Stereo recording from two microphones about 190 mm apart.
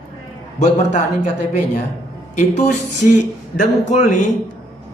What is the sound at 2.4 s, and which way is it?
Speech, 40° left (ahead or behind).